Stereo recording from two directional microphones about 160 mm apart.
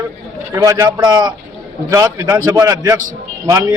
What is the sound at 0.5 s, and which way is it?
A man's voice, 20° right (ahead or behind).